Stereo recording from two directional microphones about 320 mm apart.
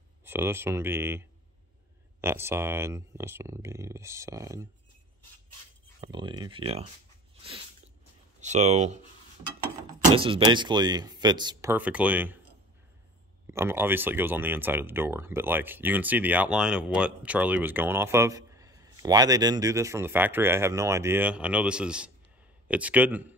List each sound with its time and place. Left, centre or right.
0.2 s speech: centre
2.2 s speech: centre
5.9 s speech: centre
8.4 s speech: right
10.0 s speech: centre
13.5 s a man's voice: centre